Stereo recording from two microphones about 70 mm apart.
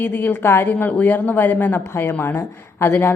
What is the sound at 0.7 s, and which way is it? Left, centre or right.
A woman's voice, left.